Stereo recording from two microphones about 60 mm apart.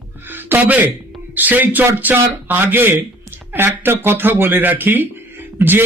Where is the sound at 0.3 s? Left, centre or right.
Right.